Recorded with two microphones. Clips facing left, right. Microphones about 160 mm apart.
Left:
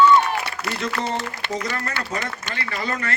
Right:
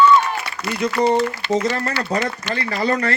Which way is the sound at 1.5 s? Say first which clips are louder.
Right 7 dB; 30° right (ahead or behind).